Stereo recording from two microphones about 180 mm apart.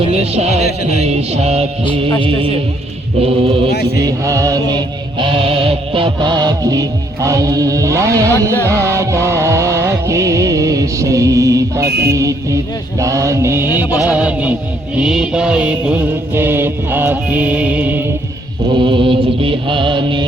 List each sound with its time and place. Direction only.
0.0 s music: 35° right (ahead or behind)
1.0 s a sound: 35° right (ahead or behind)
1.8 s music: 25° left (ahead or behind)
2.2 s mantra: 30° right (ahead or behind)
3.2 s a sound: 30° right (ahead or behind)
3.9 s mantra: 20° right (ahead or behind)
8.6 s music: 15° right (ahead or behind)
11.9 s music: 65° right (ahead or behind)
12.1 s music: 15° right (ahead or behind)
18.7 s mantra: 25° right (ahead or behind)